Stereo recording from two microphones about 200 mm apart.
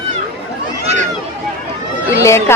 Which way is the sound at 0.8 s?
35° right (ahead or behind).